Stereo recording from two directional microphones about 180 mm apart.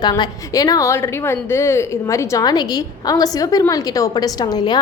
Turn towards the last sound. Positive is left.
turn(degrees=25)  # may be behind; listen again after turning